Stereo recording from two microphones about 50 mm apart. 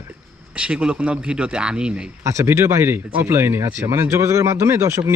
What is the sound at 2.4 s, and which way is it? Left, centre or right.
Speech, right.